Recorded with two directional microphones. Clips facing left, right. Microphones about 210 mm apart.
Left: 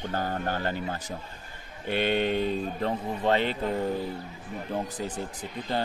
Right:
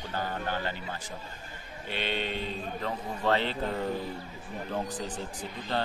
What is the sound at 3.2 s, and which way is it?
Speech, 15° left (ahead or behind).